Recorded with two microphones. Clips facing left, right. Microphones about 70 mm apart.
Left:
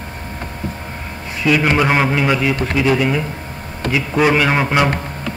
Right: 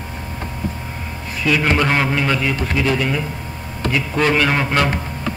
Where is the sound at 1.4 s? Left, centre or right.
Centre.